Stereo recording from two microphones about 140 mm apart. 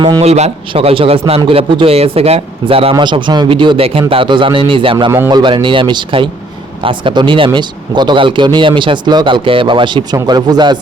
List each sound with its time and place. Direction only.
0.2 s a man's voice: 50° right (ahead or behind)
2.9 s speech: 35° right (ahead or behind)